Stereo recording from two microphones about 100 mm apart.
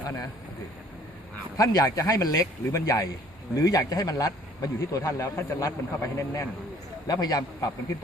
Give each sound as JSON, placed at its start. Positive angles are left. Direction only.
{"t": 0.0, "sound": "speech", "side_deg": 35}
{"t": 1.5, "sound": "speech", "side_deg": 35}